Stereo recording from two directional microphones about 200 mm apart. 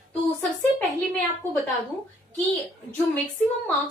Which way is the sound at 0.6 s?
10° left (ahead or behind).